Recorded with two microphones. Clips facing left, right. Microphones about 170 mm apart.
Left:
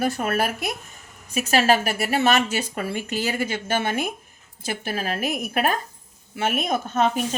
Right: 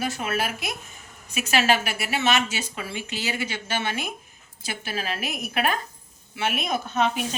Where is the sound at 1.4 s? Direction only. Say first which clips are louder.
Left 3 dB; 35° left (ahead or behind).